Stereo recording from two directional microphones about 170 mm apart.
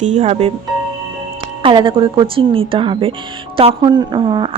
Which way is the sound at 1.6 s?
30° right (ahead or behind).